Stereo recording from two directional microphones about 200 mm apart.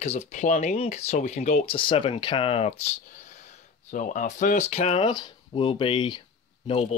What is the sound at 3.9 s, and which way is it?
Speech, 40° left (ahead or behind).